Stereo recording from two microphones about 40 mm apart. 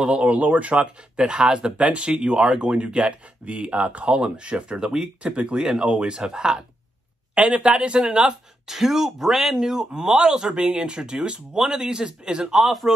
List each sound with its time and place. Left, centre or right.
0.0 s speech: right
0.4 s speech: right
0.7 s speech: right
4.7 s speech: centre
5.2 s speech: right
7.3 s speech: right
8.6 s speech: centre
12.5 s a man's voice: centre